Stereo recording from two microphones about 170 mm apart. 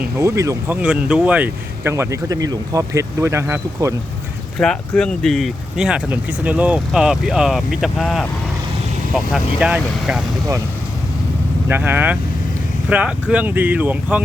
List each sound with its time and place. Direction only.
0.0 s speech: 15° right (ahead or behind)
4.6 s speech: 5° left (ahead or behind)
11.7 s speech: 10° right (ahead or behind)